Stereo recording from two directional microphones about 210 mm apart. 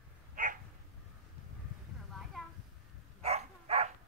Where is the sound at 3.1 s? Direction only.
30° right (ahead or behind).